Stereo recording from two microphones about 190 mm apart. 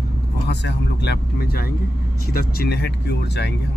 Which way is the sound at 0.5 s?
65° left (ahead or behind).